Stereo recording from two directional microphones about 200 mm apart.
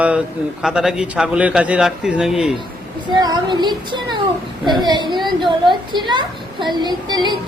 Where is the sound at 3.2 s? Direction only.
20° right (ahead or behind).